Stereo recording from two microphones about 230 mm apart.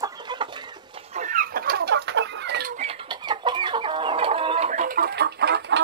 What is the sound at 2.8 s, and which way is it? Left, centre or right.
Chicken, right.